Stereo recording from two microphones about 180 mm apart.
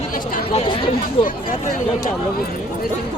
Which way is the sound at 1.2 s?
35° left (ahead or behind).